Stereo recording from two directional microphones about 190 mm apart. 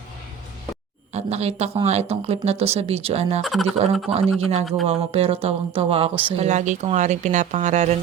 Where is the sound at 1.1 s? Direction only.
35° right (ahead or behind).